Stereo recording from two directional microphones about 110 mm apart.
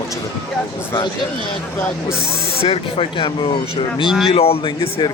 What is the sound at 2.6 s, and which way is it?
A man's voice, 65° left (ahead or behind).